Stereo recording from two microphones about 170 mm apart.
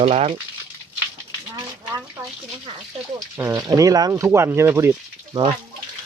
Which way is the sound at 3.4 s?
20° right (ahead or behind).